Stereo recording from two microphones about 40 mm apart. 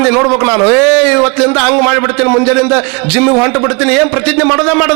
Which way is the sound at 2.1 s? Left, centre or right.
Centre.